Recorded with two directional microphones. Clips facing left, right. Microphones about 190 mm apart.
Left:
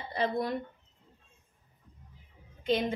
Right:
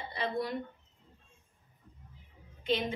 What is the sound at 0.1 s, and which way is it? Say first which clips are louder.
Speech: left 4 dB; 45° left (ahead or behind).